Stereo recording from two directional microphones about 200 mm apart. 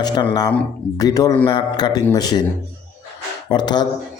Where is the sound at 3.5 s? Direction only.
20° left (ahead or behind).